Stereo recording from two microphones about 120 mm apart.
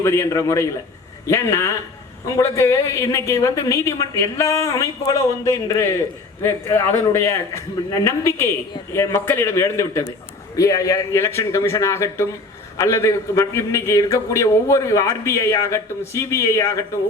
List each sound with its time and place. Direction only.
0.0 s a man's voice: 20° left (ahead or behind)